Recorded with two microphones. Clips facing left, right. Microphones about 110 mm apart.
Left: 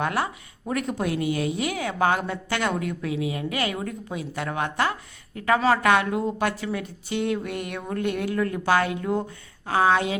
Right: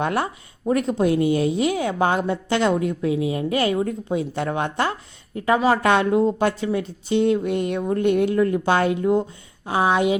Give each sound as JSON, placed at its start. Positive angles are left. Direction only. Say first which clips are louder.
{"t": 0.0, "sound": "a woman's voice", "louder": "right 3 dB", "side_deg": -25}